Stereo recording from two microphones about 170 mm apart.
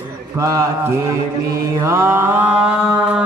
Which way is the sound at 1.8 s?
15° right (ahead or behind).